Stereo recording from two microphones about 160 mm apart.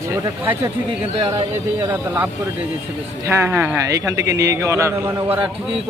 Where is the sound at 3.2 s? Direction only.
15° right (ahead or behind).